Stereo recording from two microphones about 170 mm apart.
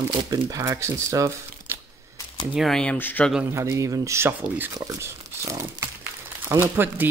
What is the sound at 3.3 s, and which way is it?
Speech, 10° right (ahead or behind).